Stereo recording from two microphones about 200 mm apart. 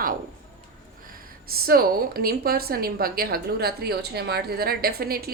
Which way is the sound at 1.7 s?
50° right (ahead or behind).